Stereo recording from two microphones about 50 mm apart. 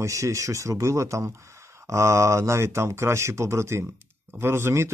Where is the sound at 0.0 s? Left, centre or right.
Right.